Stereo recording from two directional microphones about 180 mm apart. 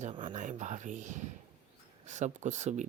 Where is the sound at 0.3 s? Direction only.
40° right (ahead or behind).